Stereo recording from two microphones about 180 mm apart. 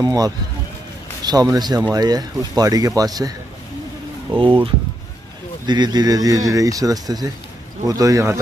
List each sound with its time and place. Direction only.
0.0 s speech: 20° right (ahead or behind)
5.7 s speech: 25° right (ahead or behind)